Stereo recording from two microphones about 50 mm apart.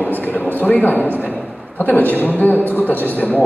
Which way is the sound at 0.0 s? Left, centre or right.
Left.